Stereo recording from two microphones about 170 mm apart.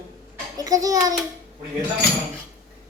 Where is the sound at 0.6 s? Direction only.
20° right (ahead or behind).